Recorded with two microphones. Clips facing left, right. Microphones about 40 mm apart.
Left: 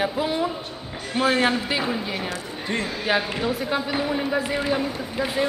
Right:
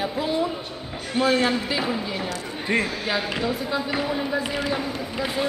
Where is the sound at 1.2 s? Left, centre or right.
Left.